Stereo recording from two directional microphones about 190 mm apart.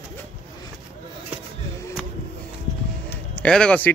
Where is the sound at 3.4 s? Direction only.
5° left (ahead or behind).